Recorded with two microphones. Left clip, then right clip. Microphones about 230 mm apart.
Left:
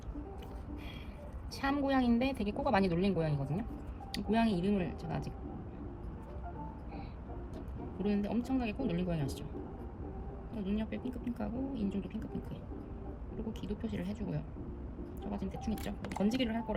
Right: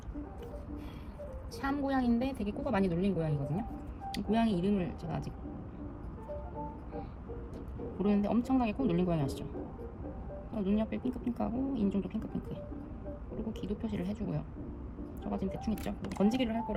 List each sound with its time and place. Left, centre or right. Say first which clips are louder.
1.6 s a woman's voice: left 1 dB; left
2.6 s speech: left 1 dB; centre
7.9 s speech: right 4 dB; centre
10.5 s speech: right 5 dB; centre